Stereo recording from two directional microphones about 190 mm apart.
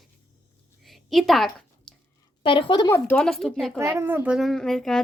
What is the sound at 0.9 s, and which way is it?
Speech, centre (ahead or behind).